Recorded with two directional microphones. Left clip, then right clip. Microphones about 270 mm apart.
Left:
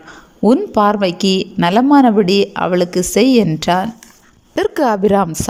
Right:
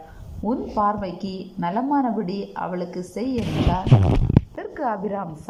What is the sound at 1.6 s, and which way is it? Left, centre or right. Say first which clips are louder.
Speech: left 11 dB; left.